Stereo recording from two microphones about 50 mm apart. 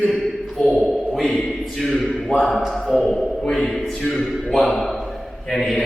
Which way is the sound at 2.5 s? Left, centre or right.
Centre.